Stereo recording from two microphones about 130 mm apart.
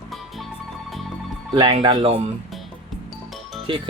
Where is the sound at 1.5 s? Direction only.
40° right (ahead or behind).